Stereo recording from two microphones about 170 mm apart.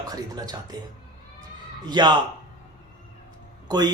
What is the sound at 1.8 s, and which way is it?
Speech, 25° right (ahead or behind).